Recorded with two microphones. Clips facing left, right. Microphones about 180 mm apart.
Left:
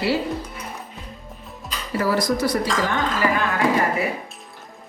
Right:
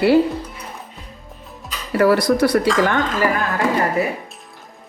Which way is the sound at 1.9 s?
65° right (ahead or behind).